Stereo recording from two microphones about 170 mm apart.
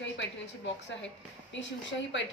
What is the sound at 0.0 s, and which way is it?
A woman's voice, 90° left.